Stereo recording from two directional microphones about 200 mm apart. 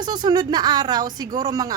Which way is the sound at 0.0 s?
20° right (ahead or behind).